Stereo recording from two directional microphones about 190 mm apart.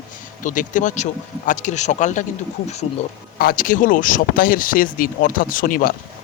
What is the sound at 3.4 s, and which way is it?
Speech, 50° left (ahead or behind).